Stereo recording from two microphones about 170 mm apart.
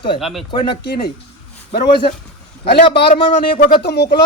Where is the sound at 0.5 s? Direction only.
30° left (ahead or behind).